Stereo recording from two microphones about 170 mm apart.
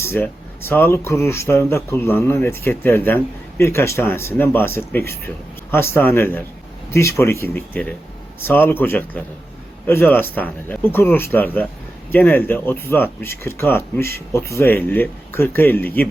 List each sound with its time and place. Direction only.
0.1 s speech: 15° left (ahead or behind)